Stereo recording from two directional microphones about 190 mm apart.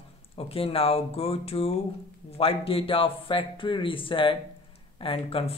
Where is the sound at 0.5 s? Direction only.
30° left (ahead or behind).